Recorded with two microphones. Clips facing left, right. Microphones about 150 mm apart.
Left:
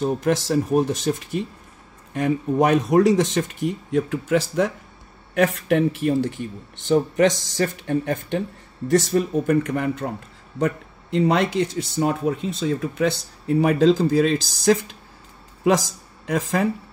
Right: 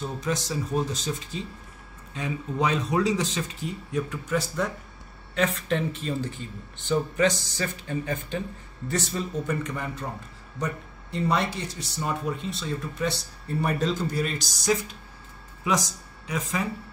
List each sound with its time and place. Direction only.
0.0 s speech: 60° left (ahead or behind)
5.3 s speech: 60° left (ahead or behind)
10.6 s speech: 90° left
12.1 s speech: 55° left (ahead or behind)
12.6 s speech: 90° left
16.3 s speech: 65° left (ahead or behind)